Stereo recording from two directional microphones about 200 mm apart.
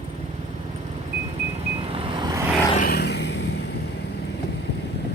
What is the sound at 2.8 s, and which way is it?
Vehicle, 55° left (ahead or behind).